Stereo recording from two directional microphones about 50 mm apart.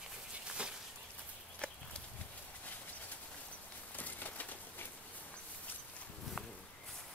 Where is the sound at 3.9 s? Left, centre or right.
Left.